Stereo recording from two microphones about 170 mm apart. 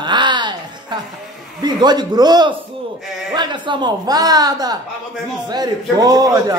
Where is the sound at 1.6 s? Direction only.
25° right (ahead or behind).